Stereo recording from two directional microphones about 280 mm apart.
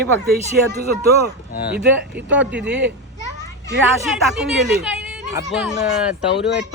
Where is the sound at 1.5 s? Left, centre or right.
Left.